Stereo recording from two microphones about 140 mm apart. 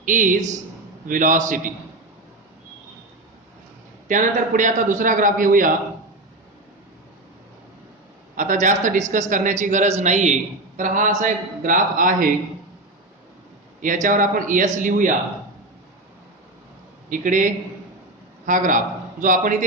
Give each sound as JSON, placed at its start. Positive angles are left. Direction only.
{"t": 0.0, "sound": "a man's voice", "side_deg": -70}
{"t": 4.1, "sound": "a man's voice", "side_deg": -65}
{"t": 8.4, "sound": "a woman's voice", "side_deg": -65}
{"t": 13.8, "sound": "a man's voice", "side_deg": -70}
{"t": 17.1, "sound": "a man's voice", "side_deg": -70}